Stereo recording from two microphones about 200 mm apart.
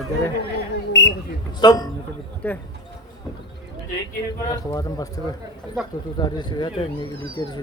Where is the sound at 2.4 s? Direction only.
5° left (ahead or behind).